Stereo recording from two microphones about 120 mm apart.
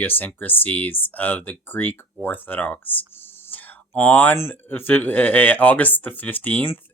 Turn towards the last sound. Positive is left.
turn(degrees=15)  # may be behind; listen again after turning